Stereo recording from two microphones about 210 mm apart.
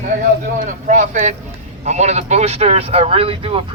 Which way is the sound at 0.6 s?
40° right (ahead or behind).